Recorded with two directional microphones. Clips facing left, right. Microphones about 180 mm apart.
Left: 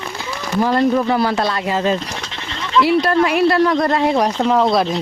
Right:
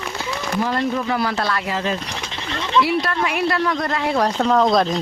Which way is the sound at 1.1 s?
30° left (ahead or behind).